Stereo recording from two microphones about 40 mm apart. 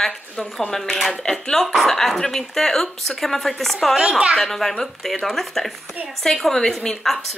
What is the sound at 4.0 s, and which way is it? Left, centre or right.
Speech, right.